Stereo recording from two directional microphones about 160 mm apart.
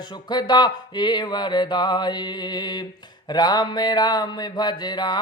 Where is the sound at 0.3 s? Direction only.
25° left (ahead or behind).